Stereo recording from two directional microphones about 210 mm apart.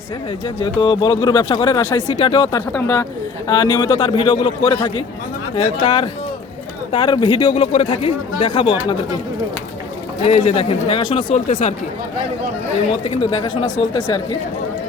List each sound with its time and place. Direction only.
0.6 s a woman's voice: 25° left (ahead or behind)
10.2 s speech: 30° left (ahead or behind)
12.9 s speech: 25° left (ahead or behind)